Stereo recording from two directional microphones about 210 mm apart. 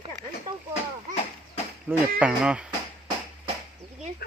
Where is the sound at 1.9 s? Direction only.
10° right (ahead or behind).